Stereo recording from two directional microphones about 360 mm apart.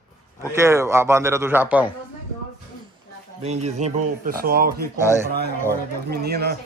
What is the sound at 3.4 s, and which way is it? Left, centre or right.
Speech, centre.